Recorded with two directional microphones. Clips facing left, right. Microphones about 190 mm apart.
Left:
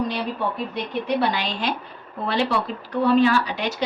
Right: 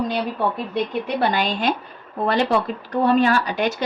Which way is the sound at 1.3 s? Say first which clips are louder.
Right 4 dB; 45° right (ahead or behind).